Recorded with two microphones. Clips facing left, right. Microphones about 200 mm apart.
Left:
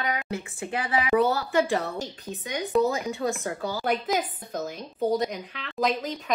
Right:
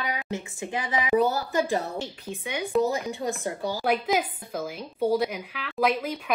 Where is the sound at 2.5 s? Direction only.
10° right (ahead or behind).